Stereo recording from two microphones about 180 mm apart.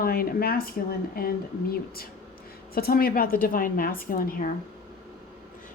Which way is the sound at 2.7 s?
55° left (ahead or behind).